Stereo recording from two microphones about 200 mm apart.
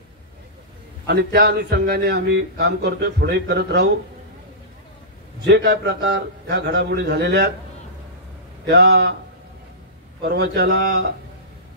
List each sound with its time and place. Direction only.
1.0 s a man's voice: 55° right (ahead or behind)
5.5 s a man's voice: 50° right (ahead or behind)
8.6 s a man's voice: 60° right (ahead or behind)
10.2 s a man's voice: 55° right (ahead or behind)